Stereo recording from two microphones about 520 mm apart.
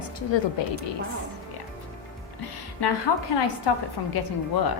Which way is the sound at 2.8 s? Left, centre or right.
Left.